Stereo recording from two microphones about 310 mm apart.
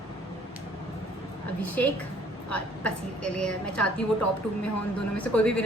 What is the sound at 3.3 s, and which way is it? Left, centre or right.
Speech, centre.